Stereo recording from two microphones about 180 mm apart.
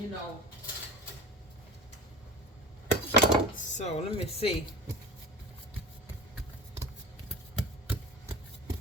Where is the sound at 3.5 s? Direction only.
40° left (ahead or behind).